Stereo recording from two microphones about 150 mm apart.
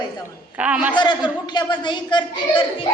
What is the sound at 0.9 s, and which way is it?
A woman's voice, 30° left (ahead or behind).